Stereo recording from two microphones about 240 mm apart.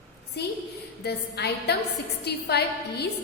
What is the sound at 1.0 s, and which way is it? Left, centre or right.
A woman's voice, left.